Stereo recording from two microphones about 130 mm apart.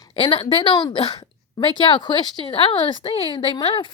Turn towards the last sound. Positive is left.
turn(degrees=40)  # may be behind; listen again after turning